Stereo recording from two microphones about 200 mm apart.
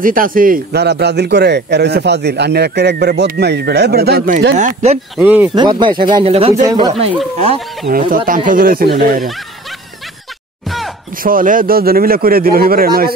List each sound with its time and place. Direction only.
0.0 s a man's voice: 45° right (ahead or behind)
4.6 s speech: 40° right (ahead or behind)
5.1 s speech: 10° right (ahead or behind)
5.5 s speech: 20° right (ahead or behind)
6.6 s speech: 20° right (ahead or behind)
6.9 s speech: 30° right (ahead or behind)
7.9 s speech: 45° right (ahead or behind)
11.2 s speech: 45° right (ahead or behind)